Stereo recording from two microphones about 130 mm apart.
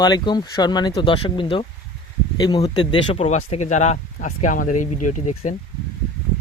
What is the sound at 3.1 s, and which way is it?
Speech, 55° left (ahead or behind).